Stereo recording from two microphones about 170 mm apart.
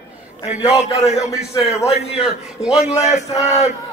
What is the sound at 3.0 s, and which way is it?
Speech, 45° left (ahead or behind).